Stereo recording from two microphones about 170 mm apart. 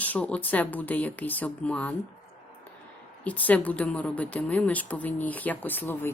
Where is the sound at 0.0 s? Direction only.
10° left (ahead or behind).